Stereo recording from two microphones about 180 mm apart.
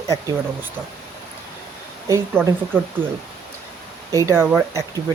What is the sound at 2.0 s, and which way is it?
Speech, 15° right (ahead or behind).